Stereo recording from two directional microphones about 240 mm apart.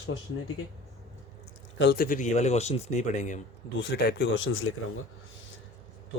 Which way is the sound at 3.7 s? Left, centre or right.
Left.